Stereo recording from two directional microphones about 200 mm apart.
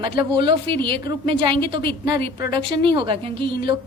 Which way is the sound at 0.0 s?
25° right (ahead or behind).